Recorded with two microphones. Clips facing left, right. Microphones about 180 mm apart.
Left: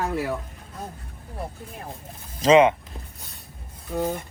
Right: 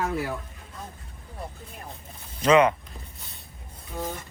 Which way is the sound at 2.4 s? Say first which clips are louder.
Left 3 dB; 25° left (ahead or behind).